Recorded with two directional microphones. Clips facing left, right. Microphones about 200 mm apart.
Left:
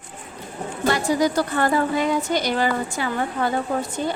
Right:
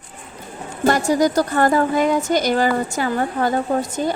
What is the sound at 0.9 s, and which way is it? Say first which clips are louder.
A woman's voice: right 3 dB; 45° right (ahead or behind).